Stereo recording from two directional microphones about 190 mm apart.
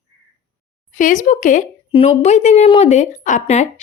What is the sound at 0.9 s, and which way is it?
Speech, 40° left (ahead or behind).